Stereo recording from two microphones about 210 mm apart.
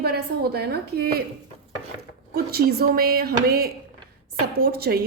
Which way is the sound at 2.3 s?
50° right (ahead or behind).